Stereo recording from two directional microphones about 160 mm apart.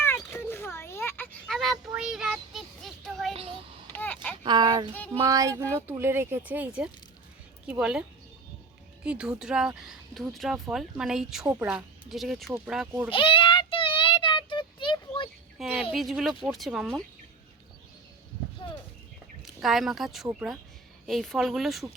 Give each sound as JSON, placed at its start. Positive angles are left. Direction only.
{"t": 0.0, "sound": "a sound", "side_deg": 15}
{"t": 1.5, "sound": "child singing", "side_deg": 0}
{"t": 3.9, "sound": "a sound", "side_deg": 10}
{"t": 4.4, "sound": "speech", "side_deg": -25}
{"t": 9.0, "sound": "speech", "side_deg": -5}
{"t": 13.1, "sound": "child singing", "side_deg": 35}
{"t": 15.5, "sound": "speech", "side_deg": 0}
{"t": 18.6, "sound": "a sound", "side_deg": 25}
{"t": 19.5, "sound": "speech", "side_deg": 0}